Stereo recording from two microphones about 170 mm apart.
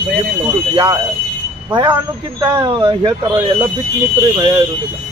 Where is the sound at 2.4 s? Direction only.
25° right (ahead or behind).